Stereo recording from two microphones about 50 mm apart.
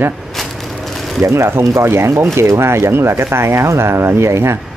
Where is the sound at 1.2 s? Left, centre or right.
Right.